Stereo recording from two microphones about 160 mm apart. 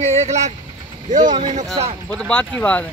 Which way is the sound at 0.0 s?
45° right (ahead or behind).